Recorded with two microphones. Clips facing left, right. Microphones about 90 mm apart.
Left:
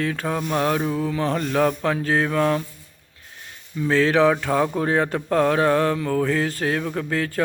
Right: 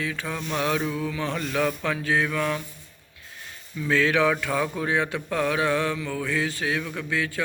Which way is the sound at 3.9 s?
35° left (ahead or behind).